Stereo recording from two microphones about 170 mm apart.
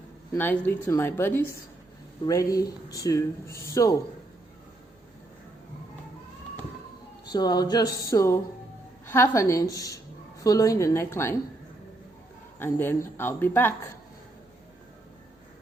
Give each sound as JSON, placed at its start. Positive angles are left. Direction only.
{"t": 0.3, "sound": "a woman's voice", "side_deg": 10}
{"t": 7.3, "sound": "a woman's voice", "side_deg": 25}
{"t": 12.5, "sound": "a woman's voice", "side_deg": 15}